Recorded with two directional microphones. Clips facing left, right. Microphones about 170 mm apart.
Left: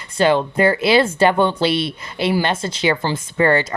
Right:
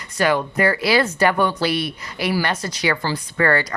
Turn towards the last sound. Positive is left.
turn(degrees=25)  # may be behind; listen again after turning